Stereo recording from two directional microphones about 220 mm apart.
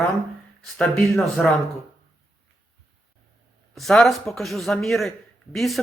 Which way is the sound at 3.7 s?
Centre (ahead or behind).